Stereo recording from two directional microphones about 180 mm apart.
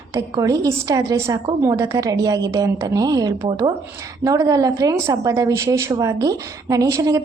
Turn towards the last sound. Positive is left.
turn(degrees=-20)  # may be behind; listen again after turning